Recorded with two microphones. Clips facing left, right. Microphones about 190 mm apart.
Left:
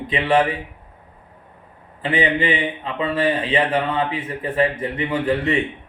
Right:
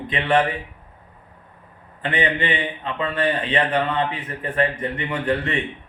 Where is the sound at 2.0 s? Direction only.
10° left (ahead or behind).